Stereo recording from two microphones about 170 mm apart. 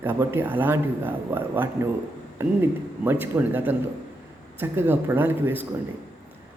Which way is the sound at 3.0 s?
10° right (ahead or behind).